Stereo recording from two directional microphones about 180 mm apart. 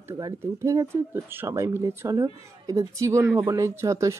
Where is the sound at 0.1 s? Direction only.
20° right (ahead or behind).